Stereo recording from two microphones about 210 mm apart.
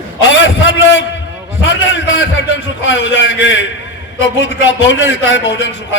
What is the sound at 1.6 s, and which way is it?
A man's voice, 60° left (ahead or behind).